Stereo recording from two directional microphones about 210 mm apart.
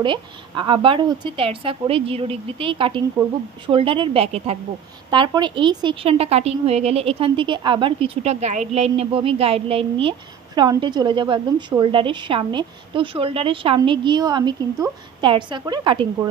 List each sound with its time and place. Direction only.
0.0 s a woman's voice: 20° right (ahead or behind)